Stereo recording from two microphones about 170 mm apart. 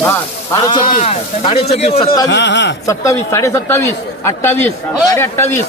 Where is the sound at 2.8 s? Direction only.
15° left (ahead or behind).